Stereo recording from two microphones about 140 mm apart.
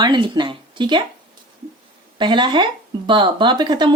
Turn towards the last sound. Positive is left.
turn(degrees=-35)  # may be behind; listen again after turning